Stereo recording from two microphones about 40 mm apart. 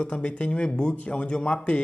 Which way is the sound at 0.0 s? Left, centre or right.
Left.